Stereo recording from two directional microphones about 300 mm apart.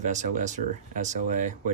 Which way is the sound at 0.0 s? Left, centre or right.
Right.